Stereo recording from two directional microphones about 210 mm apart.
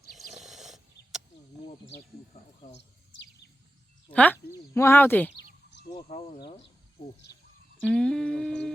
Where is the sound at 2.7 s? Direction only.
55° left (ahead or behind).